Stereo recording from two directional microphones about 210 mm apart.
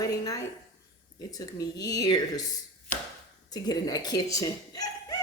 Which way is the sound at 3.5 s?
20° left (ahead or behind).